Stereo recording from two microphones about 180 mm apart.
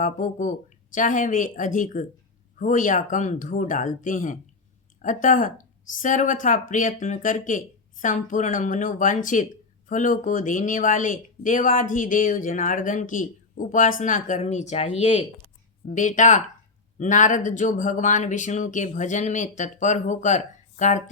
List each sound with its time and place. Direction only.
0.0 s speech: 45° left (ahead or behind)